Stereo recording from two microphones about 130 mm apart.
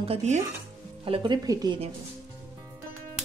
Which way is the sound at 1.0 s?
40° right (ahead or behind).